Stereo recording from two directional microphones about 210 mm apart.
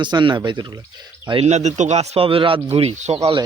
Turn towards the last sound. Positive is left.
turn(degrees=-30)  # may be behind; listen again after turning